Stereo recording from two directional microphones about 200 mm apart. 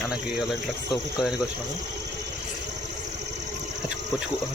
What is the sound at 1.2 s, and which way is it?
Speech, 5° right (ahead or behind).